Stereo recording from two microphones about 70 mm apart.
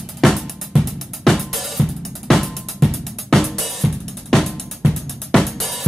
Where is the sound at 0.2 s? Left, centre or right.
Centre.